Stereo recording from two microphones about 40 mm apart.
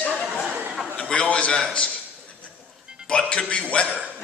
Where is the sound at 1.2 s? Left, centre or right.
Left.